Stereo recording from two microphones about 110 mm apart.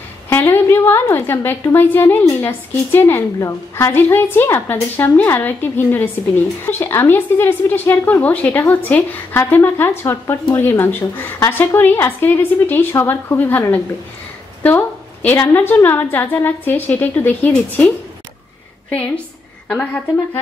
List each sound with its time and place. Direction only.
0.3 s a woman's voice: 20° left (ahead or behind)
3.9 s a woman's voice: 20° left (ahead or behind)
19.7 s a woman's voice: 10° left (ahead or behind)